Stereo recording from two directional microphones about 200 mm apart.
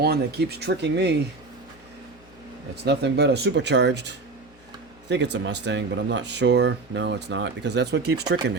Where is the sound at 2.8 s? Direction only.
55° right (ahead or behind).